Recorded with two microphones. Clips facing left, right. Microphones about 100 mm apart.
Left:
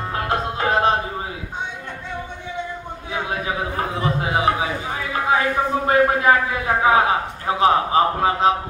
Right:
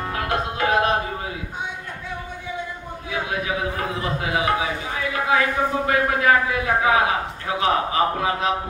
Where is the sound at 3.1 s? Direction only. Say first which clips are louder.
Left 1 dB; 30° left (ahead or behind).